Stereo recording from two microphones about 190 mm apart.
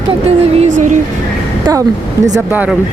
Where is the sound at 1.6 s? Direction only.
15° right (ahead or behind).